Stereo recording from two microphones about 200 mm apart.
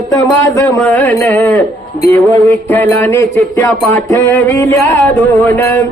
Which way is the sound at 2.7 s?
10° left (ahead or behind).